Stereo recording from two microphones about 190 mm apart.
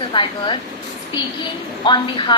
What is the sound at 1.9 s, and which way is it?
Speech, 25° left (ahead or behind).